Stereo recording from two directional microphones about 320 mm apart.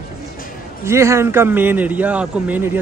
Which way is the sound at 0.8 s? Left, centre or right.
Centre.